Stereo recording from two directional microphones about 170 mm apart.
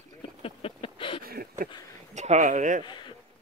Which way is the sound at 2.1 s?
45° right (ahead or behind).